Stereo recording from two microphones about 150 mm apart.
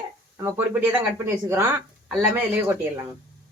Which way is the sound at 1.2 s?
15° right (ahead or behind).